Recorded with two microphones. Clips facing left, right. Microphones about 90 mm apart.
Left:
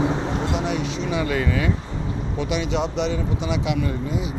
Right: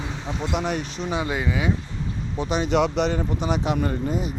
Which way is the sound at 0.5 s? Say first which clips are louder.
Left 2 dB; 50° right (ahead or behind).